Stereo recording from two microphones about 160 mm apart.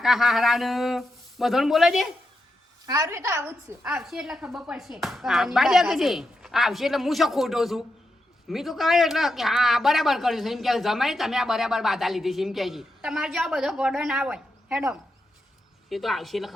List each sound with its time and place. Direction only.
0.0 s speech: centre (ahead or behind)
2.8 s a woman's voice: 20° right (ahead or behind)
3.8 s speech: centre (ahead or behind)
15.9 s speech: centre (ahead or behind)